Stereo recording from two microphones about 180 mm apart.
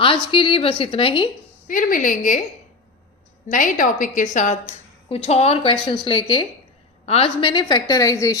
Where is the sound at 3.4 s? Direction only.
45° left (ahead or behind).